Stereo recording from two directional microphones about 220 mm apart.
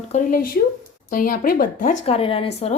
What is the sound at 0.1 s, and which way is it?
Speech, 35° left (ahead or behind).